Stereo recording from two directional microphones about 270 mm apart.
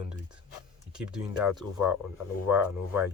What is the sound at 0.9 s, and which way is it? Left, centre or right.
Speech, centre.